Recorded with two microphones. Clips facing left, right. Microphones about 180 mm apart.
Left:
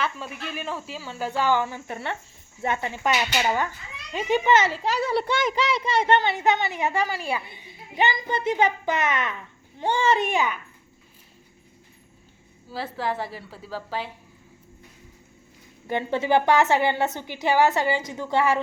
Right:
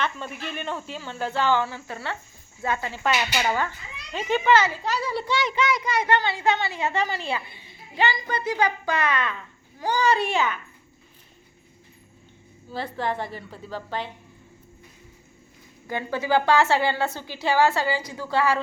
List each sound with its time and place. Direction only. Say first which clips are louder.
0.0 s a woman's voice: even; 5° left (ahead or behind); by 4.9 s 20° left (ahead or behind)
5.0 s a child's voice: left 3 dB; 60° left (ahead or behind)
5.6 s a woman's voice: left 2 dB; 30° left (ahead or behind)
12.7 s a woman's voice: even; 5° left (ahead or behind)
15.9 s a woman's voice: left 2 dB; 25° left (ahead or behind)